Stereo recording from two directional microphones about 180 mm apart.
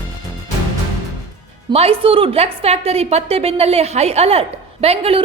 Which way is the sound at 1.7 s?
35° right (ahead or behind).